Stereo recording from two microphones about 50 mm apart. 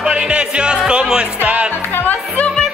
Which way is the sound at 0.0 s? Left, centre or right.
Centre.